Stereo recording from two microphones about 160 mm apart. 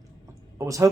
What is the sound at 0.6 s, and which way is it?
Speech, 20° right (ahead or behind).